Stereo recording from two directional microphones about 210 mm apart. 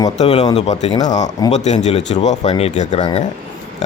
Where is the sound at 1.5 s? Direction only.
35° left (ahead or behind).